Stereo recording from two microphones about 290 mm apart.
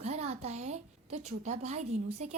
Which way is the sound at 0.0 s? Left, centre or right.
Right.